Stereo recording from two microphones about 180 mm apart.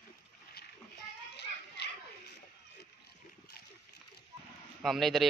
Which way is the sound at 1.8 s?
70° left (ahead or behind).